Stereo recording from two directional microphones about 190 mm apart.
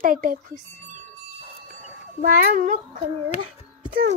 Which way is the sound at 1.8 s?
45° right (ahead or behind).